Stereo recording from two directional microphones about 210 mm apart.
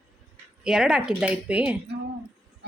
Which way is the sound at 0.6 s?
5° right (ahead or behind).